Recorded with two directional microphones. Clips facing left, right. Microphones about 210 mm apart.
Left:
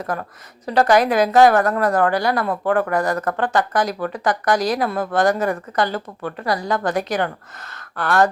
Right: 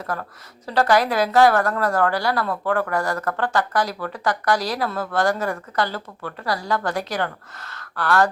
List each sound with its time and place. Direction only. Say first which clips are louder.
0.0 s speech: left 3 dB; 20° left (ahead or behind)